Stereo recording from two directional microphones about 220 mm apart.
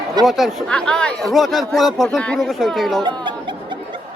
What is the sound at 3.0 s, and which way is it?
Laughter, 20° right (ahead or behind).